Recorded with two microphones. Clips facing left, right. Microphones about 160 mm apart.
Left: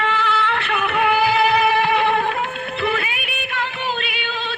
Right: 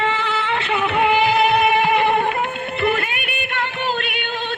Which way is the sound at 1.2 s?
Centre (ahead or behind).